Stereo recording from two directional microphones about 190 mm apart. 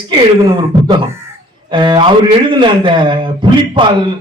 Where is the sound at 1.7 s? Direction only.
25° right (ahead or behind).